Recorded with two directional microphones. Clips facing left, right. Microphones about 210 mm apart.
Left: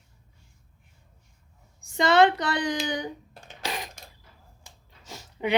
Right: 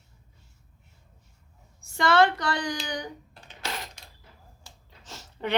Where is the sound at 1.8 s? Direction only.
20° left (ahead or behind).